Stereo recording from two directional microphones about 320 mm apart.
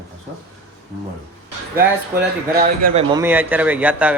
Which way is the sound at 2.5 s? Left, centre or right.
Right.